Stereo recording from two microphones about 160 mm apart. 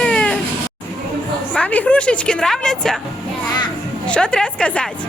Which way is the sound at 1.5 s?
10° left (ahead or behind).